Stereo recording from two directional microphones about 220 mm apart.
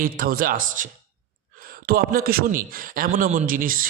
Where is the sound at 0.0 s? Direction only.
40° right (ahead or behind).